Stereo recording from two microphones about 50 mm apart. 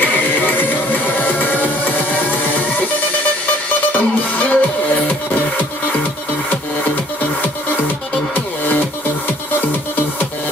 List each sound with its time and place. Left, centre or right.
0.0 s music: left
3.9 s music: left